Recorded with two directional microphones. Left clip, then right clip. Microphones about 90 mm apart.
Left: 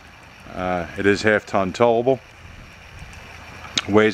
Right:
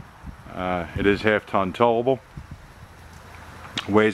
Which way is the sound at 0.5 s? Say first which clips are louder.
Left 2 dB; 15° left (ahead or behind).